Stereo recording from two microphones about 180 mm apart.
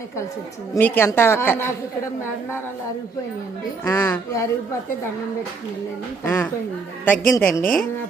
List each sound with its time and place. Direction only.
0.7 s a woman's voice: 10° left (ahead or behind)
3.8 s a woman's voice: 15° left (ahead or behind)
6.2 s a woman's voice: 20° left (ahead or behind)